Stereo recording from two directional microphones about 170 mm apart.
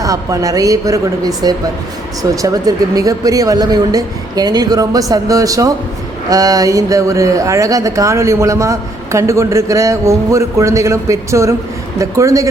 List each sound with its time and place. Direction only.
0.0 s speech: 20° right (ahead or behind)